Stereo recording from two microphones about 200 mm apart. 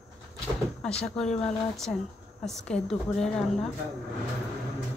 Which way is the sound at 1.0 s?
5° left (ahead or behind).